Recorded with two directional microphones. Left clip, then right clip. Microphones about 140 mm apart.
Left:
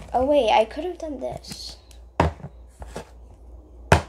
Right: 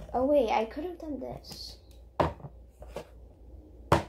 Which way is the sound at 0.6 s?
5° left (ahead or behind).